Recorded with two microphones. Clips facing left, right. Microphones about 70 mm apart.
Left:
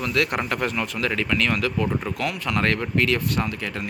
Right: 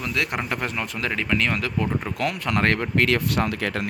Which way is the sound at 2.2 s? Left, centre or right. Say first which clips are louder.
Right 3 dB; right.